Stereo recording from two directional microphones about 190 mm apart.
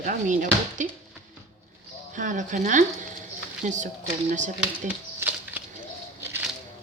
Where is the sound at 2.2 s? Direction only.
40° right (ahead or behind).